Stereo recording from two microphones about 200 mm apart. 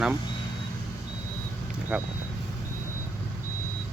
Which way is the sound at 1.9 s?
5° right (ahead or behind).